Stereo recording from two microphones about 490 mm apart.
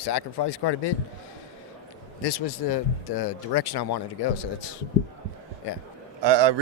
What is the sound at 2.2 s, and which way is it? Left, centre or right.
Speech, left.